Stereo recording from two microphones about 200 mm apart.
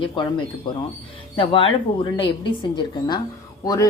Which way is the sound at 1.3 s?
25° left (ahead or behind).